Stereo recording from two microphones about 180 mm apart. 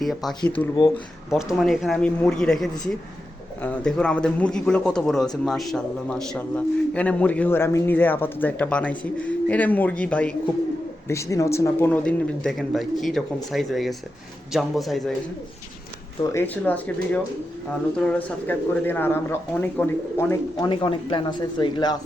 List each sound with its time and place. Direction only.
0.0 s speech: centre (ahead or behind)
16.2 s speech: 15° left (ahead or behind)
20.7 s speech: 25° left (ahead or behind)